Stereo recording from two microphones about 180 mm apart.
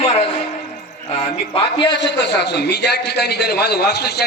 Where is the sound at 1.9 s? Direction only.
75° left (ahead or behind).